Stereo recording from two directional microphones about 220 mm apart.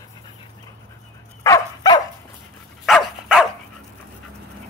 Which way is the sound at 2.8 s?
Centre (ahead or behind).